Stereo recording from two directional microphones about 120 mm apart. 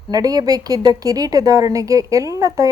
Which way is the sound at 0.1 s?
30° right (ahead or behind).